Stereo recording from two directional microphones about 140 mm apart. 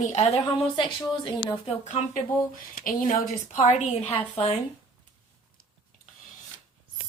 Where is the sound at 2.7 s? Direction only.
75° left (ahead or behind); by 4.2 s 50° left (ahead or behind).